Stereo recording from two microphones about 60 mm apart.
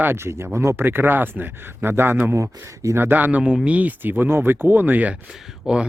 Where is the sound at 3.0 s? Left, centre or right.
Right.